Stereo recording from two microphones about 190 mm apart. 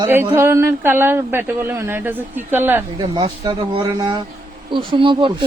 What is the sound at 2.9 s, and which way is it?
Speech, 20° right (ahead or behind).